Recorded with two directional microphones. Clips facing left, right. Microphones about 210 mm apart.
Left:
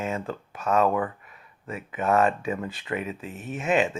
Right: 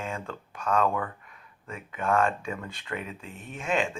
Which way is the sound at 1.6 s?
5° left (ahead or behind).